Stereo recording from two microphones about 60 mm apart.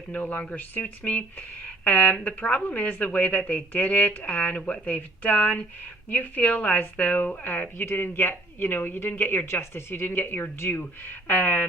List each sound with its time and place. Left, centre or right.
0.1 s speech: left